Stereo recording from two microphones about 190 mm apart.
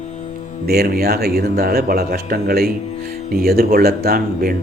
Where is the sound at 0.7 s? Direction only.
55° right (ahead or behind).